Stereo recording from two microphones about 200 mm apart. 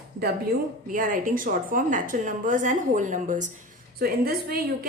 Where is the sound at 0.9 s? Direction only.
40° right (ahead or behind).